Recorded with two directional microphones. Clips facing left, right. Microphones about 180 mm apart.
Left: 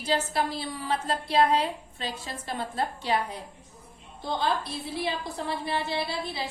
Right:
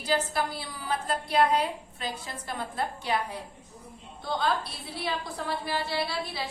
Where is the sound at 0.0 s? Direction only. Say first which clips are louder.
Left 1 dB; 25° left (ahead or behind).